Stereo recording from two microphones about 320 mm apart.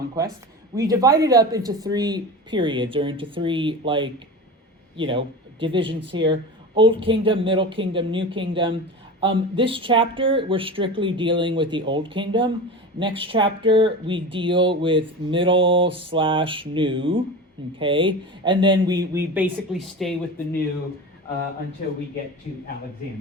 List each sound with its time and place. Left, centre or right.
0.8 s speech: centre